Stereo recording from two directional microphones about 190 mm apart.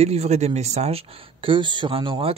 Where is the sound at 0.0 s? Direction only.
35° right (ahead or behind).